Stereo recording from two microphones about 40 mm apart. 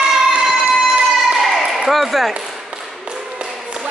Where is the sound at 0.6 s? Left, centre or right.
Right.